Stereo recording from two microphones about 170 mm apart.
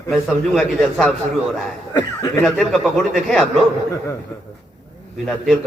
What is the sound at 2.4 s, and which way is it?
A man's voice, centre (ahead or behind).